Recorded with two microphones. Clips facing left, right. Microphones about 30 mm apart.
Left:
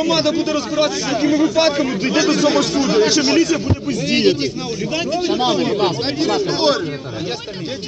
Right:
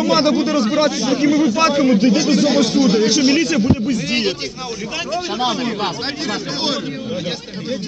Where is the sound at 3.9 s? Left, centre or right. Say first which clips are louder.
Left 3 dB; left.